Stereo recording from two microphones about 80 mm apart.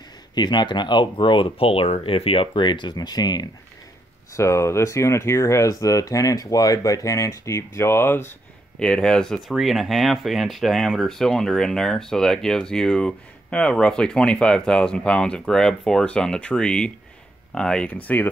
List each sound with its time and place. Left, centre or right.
0.3 s speech: left
4.4 s speech: left
8.7 s speech: centre
18.0 s speech: left